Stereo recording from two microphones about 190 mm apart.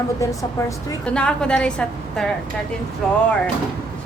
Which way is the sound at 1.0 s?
5° left (ahead or behind).